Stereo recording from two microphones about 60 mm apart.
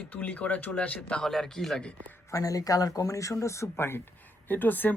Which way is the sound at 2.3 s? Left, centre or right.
Left.